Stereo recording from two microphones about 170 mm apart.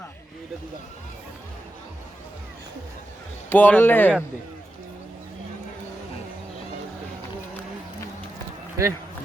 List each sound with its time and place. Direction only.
3.5 s speech: 10° left (ahead or behind)
8.8 s speech: 20° right (ahead or behind)